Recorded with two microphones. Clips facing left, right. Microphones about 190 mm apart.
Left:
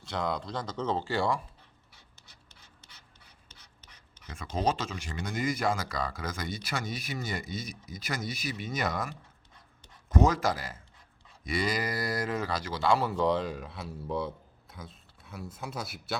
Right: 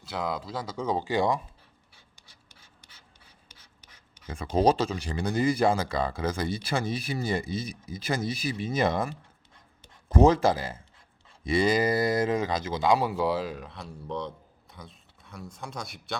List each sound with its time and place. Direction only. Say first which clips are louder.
0.0 s speech: right 1 dB; 5° right (ahead or behind)
2.1 s scratch: even; 10° right (ahead or behind)
3.5 s a sound: even; 10° right (ahead or behind)
4.5 s speech: right 7 dB; 35° right (ahead or behind); by 16.1 s 5° left (ahead or behind)